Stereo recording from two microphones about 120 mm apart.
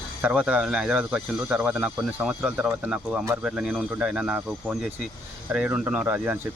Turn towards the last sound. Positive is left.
turn(degrees=-15)  # may be behind; listen again after turning